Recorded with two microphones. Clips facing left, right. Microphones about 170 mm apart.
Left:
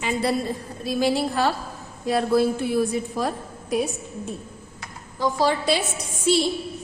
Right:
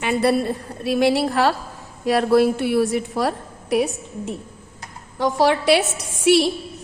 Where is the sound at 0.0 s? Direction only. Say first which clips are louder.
Right 5 dB; 65° right (ahead or behind).